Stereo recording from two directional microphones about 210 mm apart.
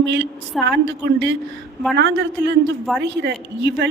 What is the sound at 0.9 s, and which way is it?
A woman's voice, 60° right (ahead or behind).